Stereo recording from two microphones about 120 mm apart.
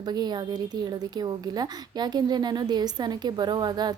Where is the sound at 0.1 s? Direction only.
35° right (ahead or behind).